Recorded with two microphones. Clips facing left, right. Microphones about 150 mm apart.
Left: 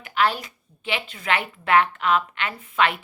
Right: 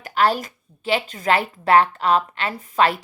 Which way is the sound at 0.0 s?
40° right (ahead or behind).